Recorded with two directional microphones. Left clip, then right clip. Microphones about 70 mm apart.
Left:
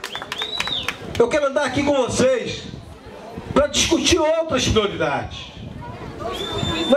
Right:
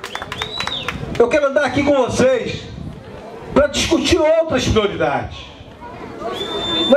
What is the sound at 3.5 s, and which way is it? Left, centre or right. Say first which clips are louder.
A man's voice: right 3 dB; left.